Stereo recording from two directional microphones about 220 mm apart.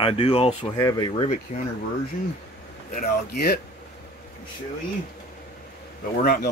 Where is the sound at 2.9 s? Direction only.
40° left (ahead or behind).